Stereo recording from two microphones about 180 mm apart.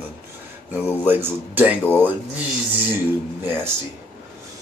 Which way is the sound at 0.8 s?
10° right (ahead or behind).